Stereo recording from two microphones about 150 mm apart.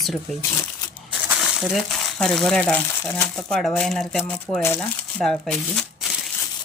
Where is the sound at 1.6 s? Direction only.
Centre (ahead or behind).